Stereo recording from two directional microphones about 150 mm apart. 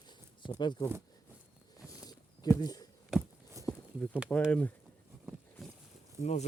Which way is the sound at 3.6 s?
20° right (ahead or behind).